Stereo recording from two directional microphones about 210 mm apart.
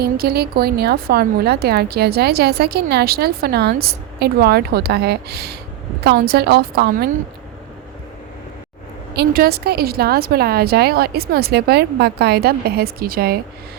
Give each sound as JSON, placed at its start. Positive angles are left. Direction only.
{"t": 0.0, "sound": "a woman's voice", "side_deg": -50}
{"t": 9.1, "sound": "a woman's voice", "side_deg": -45}